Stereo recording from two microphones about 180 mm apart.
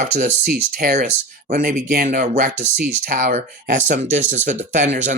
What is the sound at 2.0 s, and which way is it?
Speech, 40° right (ahead or behind).